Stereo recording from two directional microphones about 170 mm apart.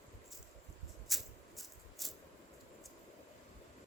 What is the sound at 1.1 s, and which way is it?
Rattle, centre (ahead or behind).